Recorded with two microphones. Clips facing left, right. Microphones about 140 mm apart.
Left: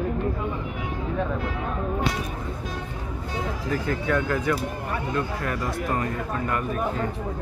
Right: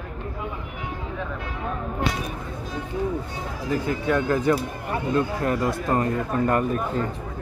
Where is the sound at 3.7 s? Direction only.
20° right (ahead or behind); by 6.6 s 35° right (ahead or behind).